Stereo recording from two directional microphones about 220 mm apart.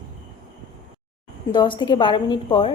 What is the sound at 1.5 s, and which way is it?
A woman's voice, 20° left (ahead or behind).